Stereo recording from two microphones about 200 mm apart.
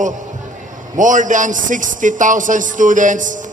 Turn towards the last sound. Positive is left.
turn(degrees=-40)  # may be behind; listen again after turning